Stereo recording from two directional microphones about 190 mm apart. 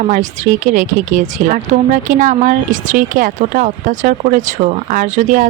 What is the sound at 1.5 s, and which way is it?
Speech, 45° right (ahead or behind).